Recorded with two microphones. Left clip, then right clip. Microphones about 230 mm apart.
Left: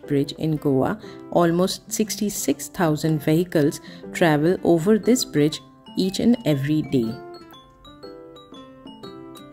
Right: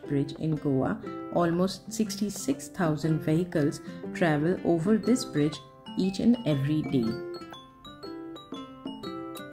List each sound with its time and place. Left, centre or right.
0.0 s speech: left
7.0 s speech: centre
8.0 s music: centre